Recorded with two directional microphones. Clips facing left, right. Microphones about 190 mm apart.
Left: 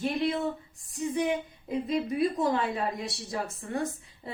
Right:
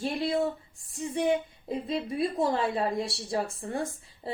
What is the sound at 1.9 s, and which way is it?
Speech, 30° right (ahead or behind).